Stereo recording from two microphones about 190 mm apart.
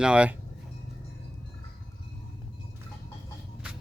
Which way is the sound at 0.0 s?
5° right (ahead or behind).